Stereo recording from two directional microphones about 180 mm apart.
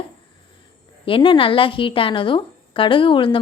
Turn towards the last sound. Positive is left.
turn(degrees=30)  # may be behind; listen again after turning